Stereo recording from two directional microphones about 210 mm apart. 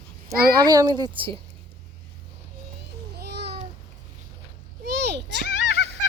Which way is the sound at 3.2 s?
55° right (ahead or behind).